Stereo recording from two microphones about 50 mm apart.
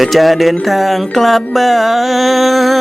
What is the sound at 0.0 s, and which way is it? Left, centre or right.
Music, centre.